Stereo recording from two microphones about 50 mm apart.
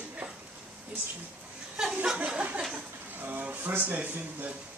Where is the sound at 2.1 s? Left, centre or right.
Right.